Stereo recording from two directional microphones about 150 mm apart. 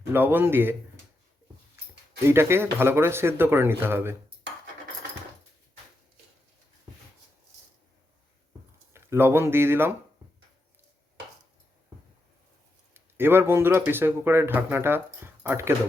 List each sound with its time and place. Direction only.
0.1 s speech: 15° right (ahead or behind)
2.2 s speech: 15° right (ahead or behind)
8.9 s speech: 15° right (ahead or behind)
12.9 s speech: 15° right (ahead or behind)